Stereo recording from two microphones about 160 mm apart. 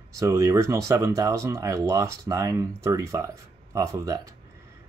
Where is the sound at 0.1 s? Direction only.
20° right (ahead or behind).